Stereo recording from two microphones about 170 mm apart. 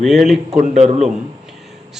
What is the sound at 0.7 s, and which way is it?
Speech, 40° right (ahead or behind).